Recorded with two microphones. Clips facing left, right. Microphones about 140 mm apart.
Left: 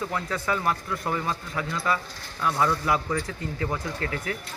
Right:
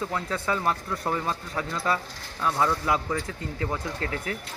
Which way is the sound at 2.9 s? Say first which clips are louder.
Left 1 dB; 25° right (ahead or behind).